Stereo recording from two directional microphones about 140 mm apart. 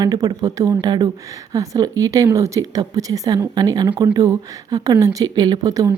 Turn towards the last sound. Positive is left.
turn(degrees=-25)  # may be behind; listen again after turning